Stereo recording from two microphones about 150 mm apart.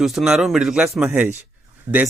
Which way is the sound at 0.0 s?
Centre (ahead or behind).